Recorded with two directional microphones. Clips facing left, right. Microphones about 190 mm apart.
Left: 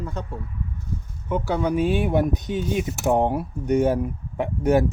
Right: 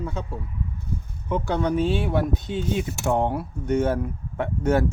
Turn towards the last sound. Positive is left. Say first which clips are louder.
# left 2 dB
turn(degrees=15)  # may be behind; listen again after turning